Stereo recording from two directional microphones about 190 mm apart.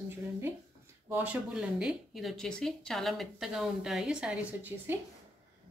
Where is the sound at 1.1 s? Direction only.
10° right (ahead or behind).